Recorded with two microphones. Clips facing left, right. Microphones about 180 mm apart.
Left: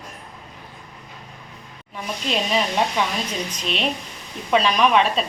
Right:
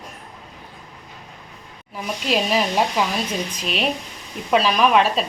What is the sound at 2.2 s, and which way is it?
A woman's voice, 5° right (ahead or behind).